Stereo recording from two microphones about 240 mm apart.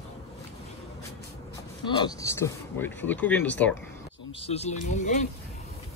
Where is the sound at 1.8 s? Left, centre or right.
Centre.